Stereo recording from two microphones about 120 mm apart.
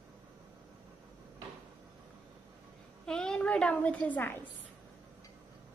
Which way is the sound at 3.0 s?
5° left (ahead or behind).